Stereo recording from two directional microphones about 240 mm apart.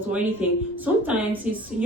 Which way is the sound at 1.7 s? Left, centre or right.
Right.